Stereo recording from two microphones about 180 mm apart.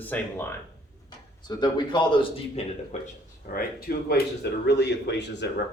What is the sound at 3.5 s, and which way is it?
Speech, 50° left (ahead or behind).